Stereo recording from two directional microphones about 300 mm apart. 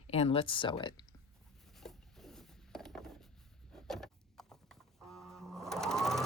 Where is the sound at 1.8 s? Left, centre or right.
Centre.